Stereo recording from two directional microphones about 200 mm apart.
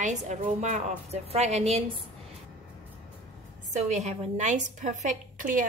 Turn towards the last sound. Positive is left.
turn(degrees=-40)  # may be behind; listen again after turning